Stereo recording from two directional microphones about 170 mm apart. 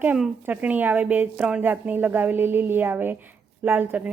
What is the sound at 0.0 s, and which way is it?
Speech, 10° right (ahead or behind).